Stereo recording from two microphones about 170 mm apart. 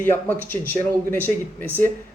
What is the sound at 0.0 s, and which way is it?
Speech, 10° left (ahead or behind).